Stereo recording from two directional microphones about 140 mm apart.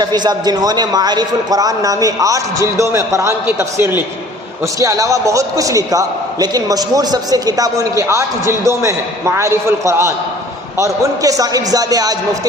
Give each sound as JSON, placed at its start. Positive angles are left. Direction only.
{"t": 0.0, "sound": "a man's voice", "side_deg": -30}